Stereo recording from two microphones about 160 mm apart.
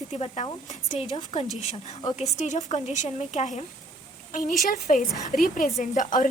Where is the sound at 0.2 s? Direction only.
40° left (ahead or behind).